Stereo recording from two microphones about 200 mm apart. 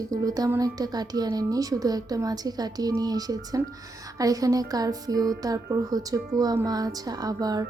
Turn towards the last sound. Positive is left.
turn(degrees=-20)  # may be behind; listen again after turning